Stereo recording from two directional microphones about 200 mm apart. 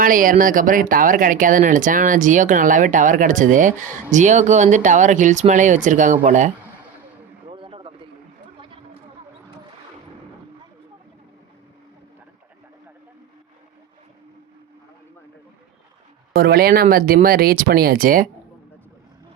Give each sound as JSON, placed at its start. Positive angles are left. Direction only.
{"t": 0.0, "sound": "speech", "side_deg": -40}
{"t": 7.4, "sound": "a sound", "side_deg": -25}
{"t": 16.3, "sound": "speech", "side_deg": -50}